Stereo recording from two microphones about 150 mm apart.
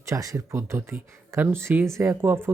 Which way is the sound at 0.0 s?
20° right (ahead or behind).